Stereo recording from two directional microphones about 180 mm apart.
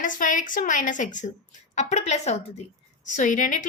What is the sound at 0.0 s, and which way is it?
A woman's voice, 50° left (ahead or behind).